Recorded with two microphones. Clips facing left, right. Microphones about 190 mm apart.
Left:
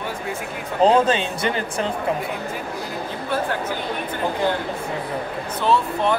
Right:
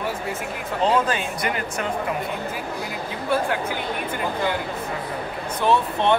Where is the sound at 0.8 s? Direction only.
30° left (ahead or behind).